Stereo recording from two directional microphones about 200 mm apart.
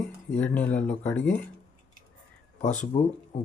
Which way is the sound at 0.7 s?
35° left (ahead or behind).